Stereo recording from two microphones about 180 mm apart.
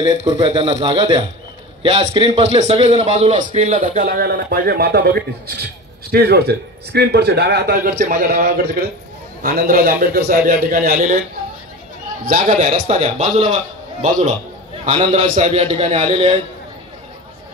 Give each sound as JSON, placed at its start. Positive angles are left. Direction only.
{"t": 0.3, "sound": "a man's voice", "side_deg": -30}
{"t": 12.3, "sound": "a man's voice", "side_deg": -50}
{"t": 12.9, "sound": "a man's voice", "side_deg": -35}
{"t": 14.9, "sound": "a man's voice", "side_deg": -30}